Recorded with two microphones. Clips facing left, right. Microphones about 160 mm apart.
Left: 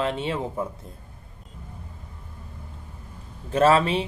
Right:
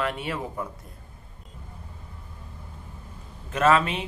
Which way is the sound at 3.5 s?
30° left (ahead or behind).